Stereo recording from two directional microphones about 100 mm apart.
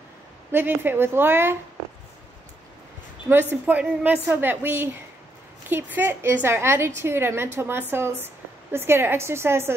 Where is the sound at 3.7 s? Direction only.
15° right (ahead or behind).